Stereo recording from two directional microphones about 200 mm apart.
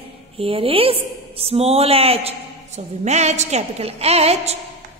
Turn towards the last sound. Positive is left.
turn(degrees=-30)  # may be behind; listen again after turning